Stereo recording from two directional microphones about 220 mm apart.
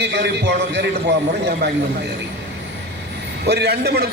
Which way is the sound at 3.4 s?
45° right (ahead or behind).